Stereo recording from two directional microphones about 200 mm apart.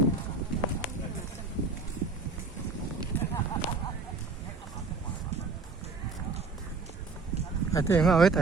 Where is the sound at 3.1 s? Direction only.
10° left (ahead or behind).